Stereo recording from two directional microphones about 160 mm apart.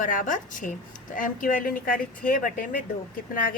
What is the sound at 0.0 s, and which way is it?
Speech, 55° left (ahead or behind).